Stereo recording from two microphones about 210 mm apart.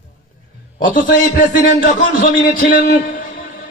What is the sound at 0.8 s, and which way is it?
A man's voice, 40° left (ahead or behind).